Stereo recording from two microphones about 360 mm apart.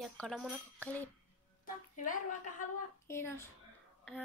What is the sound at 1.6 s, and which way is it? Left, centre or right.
A woman's voice, left.